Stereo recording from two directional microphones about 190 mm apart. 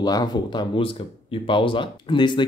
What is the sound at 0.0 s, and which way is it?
Speech, 20° left (ahead or behind).